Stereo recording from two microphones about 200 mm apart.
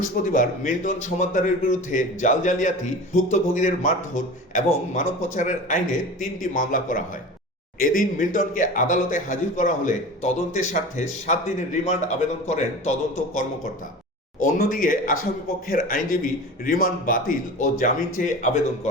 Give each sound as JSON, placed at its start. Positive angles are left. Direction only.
{"t": 0.2, "sound": "a man's voice", "side_deg": 45}
{"t": 14.3, "sound": "a man's voice", "side_deg": 45}